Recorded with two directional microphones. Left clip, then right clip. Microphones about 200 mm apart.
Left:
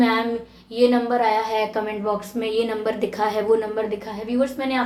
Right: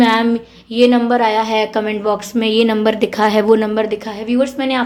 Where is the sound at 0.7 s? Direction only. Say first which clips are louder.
Right 6 dB; 50° right (ahead or behind).